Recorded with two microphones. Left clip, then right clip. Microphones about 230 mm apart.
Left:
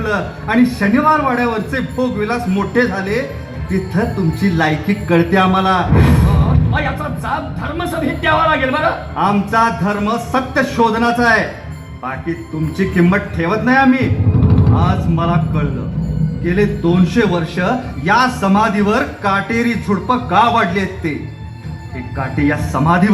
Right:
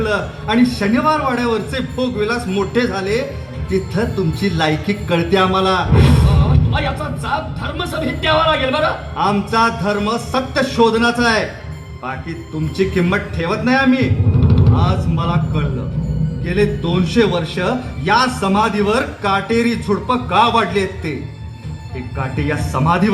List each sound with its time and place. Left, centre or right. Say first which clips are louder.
0.0 s a man's voice: even; right
12.7 s a man's voice: left 1 dB; right
22.2 s a man's voice: left 4 dB; right